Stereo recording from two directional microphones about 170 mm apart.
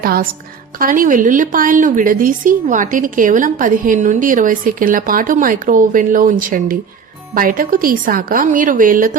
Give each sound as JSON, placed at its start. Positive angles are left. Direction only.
{"t": 0.0, "sound": "a woman's voice", "side_deg": -60}